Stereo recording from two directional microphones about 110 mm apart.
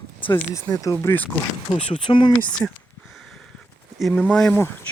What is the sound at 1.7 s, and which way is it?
Speech, 45° left (ahead or behind).